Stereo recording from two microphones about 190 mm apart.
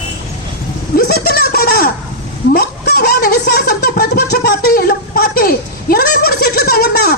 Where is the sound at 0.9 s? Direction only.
55° left (ahead or behind).